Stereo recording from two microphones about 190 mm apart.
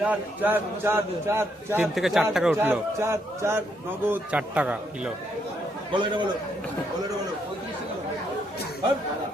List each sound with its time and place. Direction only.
0.0 s a man's voice: 10° right (ahead or behind)
5.9 s a man's voice: 25° right (ahead or behind)